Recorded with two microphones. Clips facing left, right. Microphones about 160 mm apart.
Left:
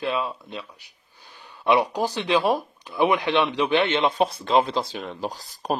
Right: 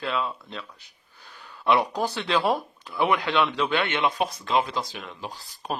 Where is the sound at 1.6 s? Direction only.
15° left (ahead or behind).